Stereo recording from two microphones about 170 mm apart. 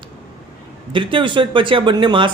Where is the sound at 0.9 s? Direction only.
30° right (ahead or behind).